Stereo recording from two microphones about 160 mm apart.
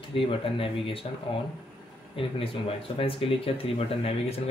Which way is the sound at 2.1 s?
35° left (ahead or behind).